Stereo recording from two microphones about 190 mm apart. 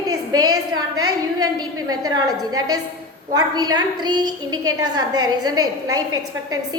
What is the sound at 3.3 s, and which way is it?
A woman's voice, 20° right (ahead or behind).